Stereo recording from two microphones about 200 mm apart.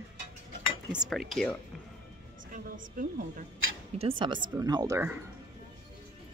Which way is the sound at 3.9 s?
25° right (ahead or behind).